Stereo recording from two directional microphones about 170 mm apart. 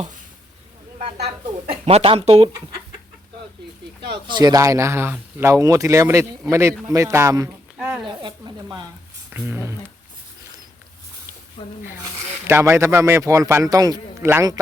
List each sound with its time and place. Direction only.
1.8 s speech: 35° right (ahead or behind)
4.1 s speech: 25° right (ahead or behind)
7.8 s a sound: 5° right (ahead or behind)
8.0 s speech: 25° right (ahead or behind)
9.3 s a sound: 10° right (ahead or behind)
12.5 s speech: 15° right (ahead or behind)